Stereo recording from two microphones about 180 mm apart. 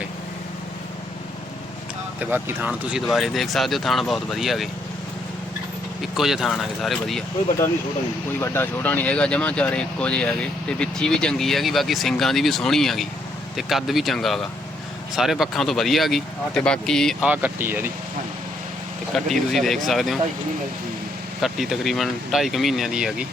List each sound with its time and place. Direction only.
2.3 s speech: 10° right (ahead or behind)
6.0 s speech: centre (ahead or behind)
8.4 s speech: 10° left (ahead or behind)
17.2 s speech: 10° right (ahead or behind)
19.1 s speech: centre (ahead or behind)
21.4 s speech: centre (ahead or behind)